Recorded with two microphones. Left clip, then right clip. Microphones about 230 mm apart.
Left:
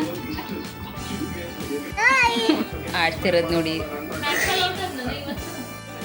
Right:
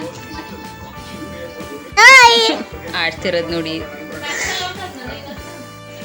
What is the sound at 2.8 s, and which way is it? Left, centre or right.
Speech, centre.